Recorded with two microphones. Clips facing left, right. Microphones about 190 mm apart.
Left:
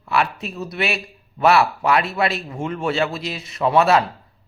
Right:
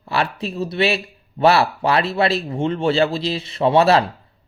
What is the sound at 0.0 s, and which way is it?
A man's voice, 35° right (ahead or behind).